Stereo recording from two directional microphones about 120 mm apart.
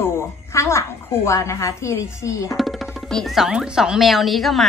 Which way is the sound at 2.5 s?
Centre (ahead or behind).